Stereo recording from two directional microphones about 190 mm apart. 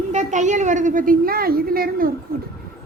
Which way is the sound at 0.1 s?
40° right (ahead or behind).